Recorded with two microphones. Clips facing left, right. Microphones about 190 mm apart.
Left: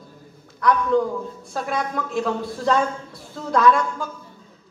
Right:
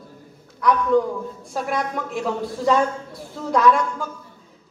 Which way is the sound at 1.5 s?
10° right (ahead or behind).